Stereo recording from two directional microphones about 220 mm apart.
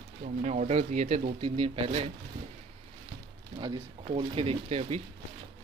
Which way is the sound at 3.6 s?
25° right (ahead or behind).